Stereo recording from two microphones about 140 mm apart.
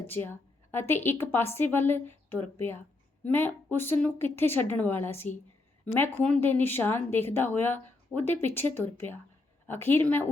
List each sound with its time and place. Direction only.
0.1 s speech: 15° left (ahead or behind)